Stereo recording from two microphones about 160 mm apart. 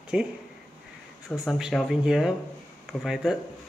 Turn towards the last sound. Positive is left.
turn(degrees=-5)  # may be behind; listen again after turning